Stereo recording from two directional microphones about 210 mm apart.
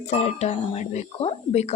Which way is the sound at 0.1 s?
30° left (ahead or behind).